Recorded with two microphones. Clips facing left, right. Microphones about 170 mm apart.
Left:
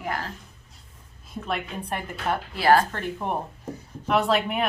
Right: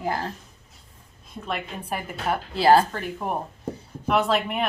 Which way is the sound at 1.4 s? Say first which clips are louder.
Even; centre (ahead or behind).